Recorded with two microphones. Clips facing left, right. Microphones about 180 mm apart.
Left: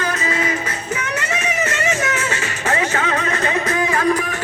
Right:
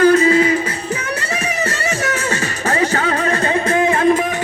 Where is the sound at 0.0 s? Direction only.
30° right (ahead or behind).